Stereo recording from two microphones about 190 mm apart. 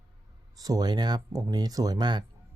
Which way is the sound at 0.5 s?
20° right (ahead or behind).